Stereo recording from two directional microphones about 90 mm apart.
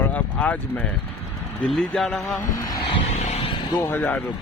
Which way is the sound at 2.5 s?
40° left (ahead or behind).